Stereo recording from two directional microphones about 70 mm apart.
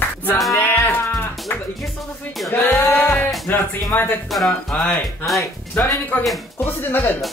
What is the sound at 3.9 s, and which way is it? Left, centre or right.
Music, left.